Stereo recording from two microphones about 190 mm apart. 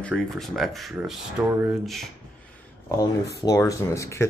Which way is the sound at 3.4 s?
15° left (ahead or behind).